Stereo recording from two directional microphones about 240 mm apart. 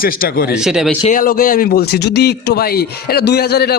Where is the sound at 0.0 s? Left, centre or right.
Left.